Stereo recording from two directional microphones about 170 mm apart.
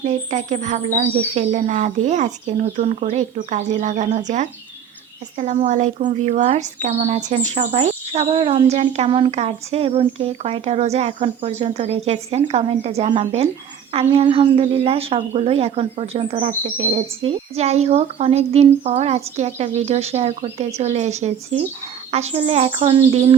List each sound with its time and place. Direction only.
0.0 s speech: 45° right (ahead or behind)